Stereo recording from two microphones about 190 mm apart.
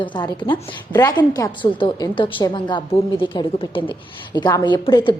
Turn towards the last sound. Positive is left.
turn(degrees=25)  # may be behind; listen again after turning